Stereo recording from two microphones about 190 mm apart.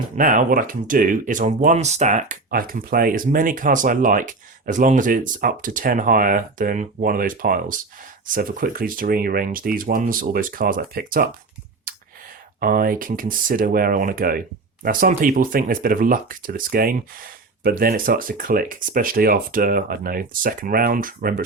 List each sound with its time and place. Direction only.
0.2 s speech: 45° right (ahead or behind)
12.5 s speech: 50° right (ahead or behind)